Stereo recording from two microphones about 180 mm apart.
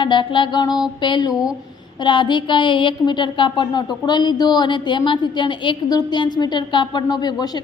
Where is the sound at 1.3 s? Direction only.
5° right (ahead or behind).